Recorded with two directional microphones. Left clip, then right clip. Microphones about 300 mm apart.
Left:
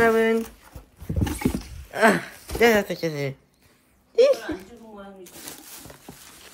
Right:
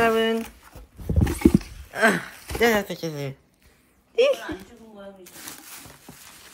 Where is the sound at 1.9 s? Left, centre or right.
Centre.